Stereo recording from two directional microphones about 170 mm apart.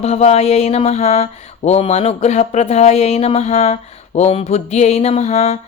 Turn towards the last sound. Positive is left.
turn(degrees=40)  # may be behind; listen again after turning